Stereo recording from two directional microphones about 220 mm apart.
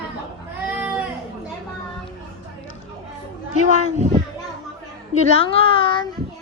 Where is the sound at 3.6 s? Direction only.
30° right (ahead or behind).